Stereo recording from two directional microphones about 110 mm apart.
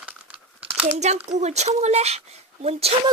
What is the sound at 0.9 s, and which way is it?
Speech, 90° right.